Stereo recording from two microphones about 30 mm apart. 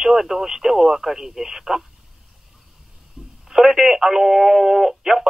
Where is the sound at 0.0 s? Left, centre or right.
Centre.